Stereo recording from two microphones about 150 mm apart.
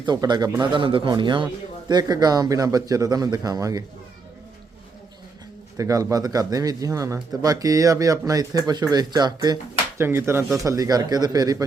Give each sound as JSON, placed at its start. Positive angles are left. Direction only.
{"t": 0.0, "sound": "a man's voice", "side_deg": -30}
{"t": 5.7, "sound": "a man's voice", "side_deg": -20}
{"t": 10.0, "sound": "a man's voice", "side_deg": -15}